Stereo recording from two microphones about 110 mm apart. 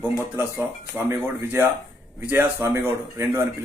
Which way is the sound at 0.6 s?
15° right (ahead or behind).